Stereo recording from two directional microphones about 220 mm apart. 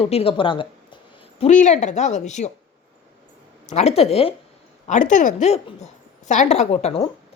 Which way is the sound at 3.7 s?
30° left (ahead or behind).